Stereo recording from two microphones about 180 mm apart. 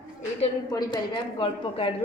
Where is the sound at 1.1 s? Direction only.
30° left (ahead or behind).